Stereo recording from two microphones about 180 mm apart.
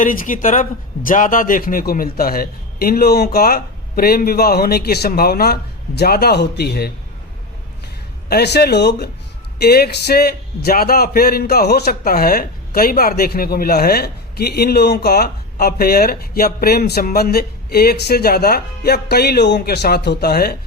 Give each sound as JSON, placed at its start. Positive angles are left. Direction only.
{"t": 0.0, "sound": "a man's voice", "side_deg": 50}
{"t": 8.3, "sound": "a man's voice", "side_deg": 65}